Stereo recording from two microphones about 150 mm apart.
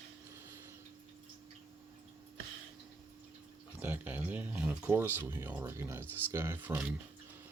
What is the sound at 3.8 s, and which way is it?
Speech, 10° right (ahead or behind).